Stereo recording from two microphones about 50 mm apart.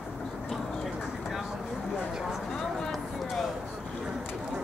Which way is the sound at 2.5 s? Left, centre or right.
Centre.